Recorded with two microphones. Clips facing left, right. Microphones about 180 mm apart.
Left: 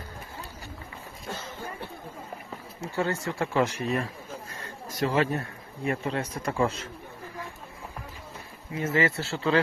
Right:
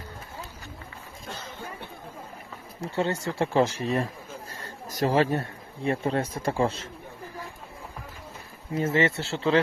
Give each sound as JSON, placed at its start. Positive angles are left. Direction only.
{"t": 2.8, "sound": "speech", "side_deg": -25}
{"t": 8.7, "sound": "speech", "side_deg": -30}